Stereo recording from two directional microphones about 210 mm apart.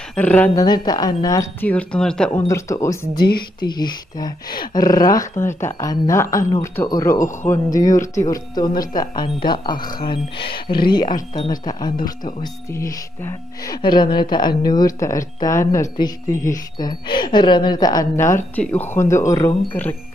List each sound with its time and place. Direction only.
0.1 s speech: 5° left (ahead or behind)
0.7 s speech: 20° left (ahead or behind)